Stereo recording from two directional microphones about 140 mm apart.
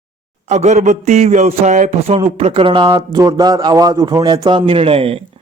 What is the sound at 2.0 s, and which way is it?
Speech, 45° right (ahead or behind).